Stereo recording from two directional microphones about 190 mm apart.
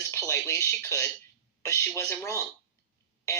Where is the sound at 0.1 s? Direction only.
15° left (ahead or behind).